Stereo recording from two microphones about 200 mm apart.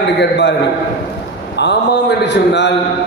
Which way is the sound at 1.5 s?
60° left (ahead or behind).